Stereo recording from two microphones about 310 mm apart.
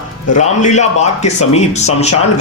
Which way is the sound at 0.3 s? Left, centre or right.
Left.